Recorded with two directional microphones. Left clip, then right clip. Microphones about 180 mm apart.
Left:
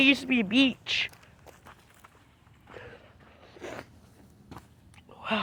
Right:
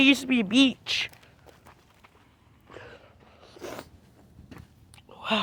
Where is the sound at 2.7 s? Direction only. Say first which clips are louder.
Right 1 dB; 25° right (ahead or behind).